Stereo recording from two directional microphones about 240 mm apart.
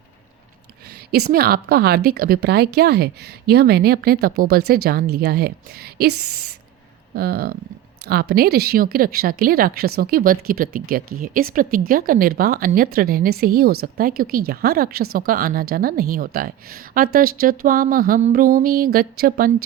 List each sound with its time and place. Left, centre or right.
1.1 s a woman's voice: right
7.2 s a woman's voice: right